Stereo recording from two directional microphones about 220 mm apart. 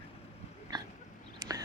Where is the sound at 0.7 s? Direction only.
20° right (ahead or behind).